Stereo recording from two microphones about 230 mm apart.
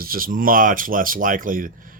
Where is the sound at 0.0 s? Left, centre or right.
Right.